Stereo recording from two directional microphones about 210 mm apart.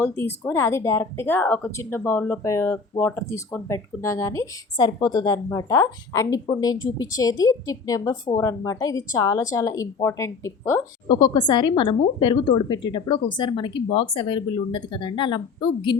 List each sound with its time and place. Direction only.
0.0 s speech: 10° left (ahead or behind)